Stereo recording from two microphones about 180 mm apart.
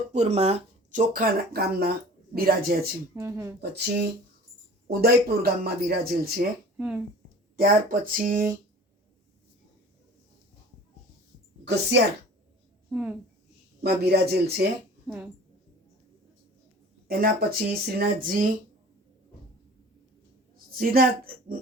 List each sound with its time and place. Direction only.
0.1 s speech: 40° right (ahead or behind); by 2.8 s 55° right (ahead or behind)
3.2 s speech: 15° right (ahead or behind)
3.6 s speech: 65° right (ahead or behind)
6.7 s speech: 5° right (ahead or behind)
7.5 s speech: 50° right (ahead or behind)
11.6 s a woman's voice: 70° right (ahead or behind)
12.9 s a woman's voice: 10° right (ahead or behind)
13.8 s speech: 65° right (ahead or behind)
15.0 s speech: 5° right (ahead or behind)
17.1 s speech: 55° right (ahead or behind)
20.7 s speech: 55° right (ahead or behind)